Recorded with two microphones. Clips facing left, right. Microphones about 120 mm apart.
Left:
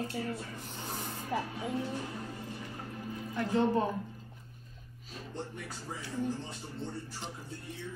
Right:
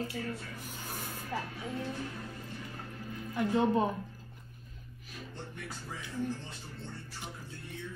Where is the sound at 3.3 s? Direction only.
15° right (ahead or behind).